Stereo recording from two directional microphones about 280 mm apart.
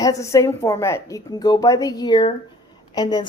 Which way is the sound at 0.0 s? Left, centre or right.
Centre.